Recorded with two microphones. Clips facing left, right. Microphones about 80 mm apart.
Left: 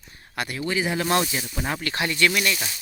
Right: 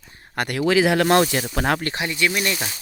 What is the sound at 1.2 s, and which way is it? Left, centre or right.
Speech, right.